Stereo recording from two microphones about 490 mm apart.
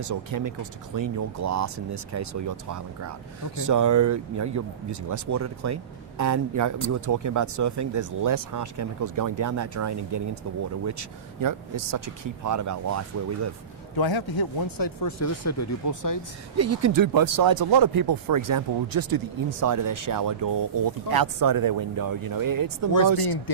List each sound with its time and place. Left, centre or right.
0.0 s speech: right
13.9 s speech: left
16.6 s speech: right